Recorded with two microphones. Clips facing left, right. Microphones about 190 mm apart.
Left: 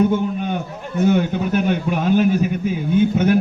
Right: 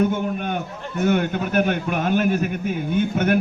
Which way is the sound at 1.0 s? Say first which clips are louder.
Left 3 dB; 55° right (ahead or behind).